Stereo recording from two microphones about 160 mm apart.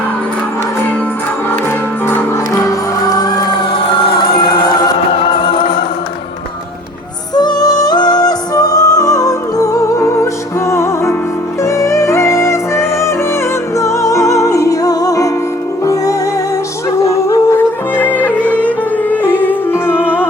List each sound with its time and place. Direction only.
4.0 s music: 25° left (ahead or behind)
7.3 s music: 25° left (ahead or behind)
17.0 s music: 20° left (ahead or behind)